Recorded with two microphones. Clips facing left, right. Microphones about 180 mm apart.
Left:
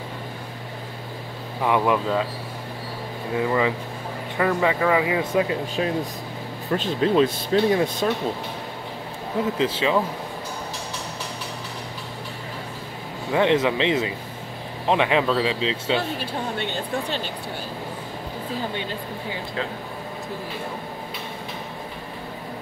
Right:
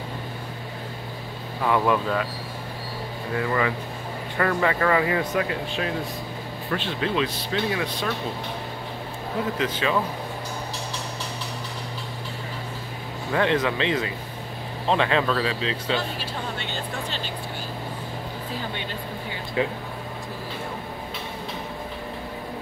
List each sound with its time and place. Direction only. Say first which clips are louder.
1.6 s speech: left 1 dB; 15° left (ahead or behind)
3.3 s speech: left 3 dB; 15° left (ahead or behind)
5.3 s speech: left 3 dB; 25° left (ahead or behind)
6.8 s speech: left 7 dB; 40° left (ahead or behind)
9.6 s speech: left 3 dB; 25° left (ahead or behind)
13.3 s speech: left 3 dB; 20° left (ahead or behind)
16.2 s speech: left 4 dB; 55° left (ahead or behind)